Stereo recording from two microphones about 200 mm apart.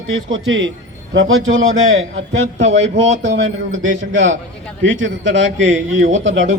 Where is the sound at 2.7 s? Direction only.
70° right (ahead or behind).